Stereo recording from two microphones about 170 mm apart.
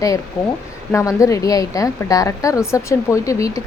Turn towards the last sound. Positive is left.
turn(degrees=20)  # may be behind; listen again after turning